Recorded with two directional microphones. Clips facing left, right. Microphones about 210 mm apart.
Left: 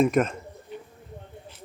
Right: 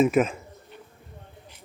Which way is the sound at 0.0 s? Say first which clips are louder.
Right 1 dB; 5° right (ahead or behind).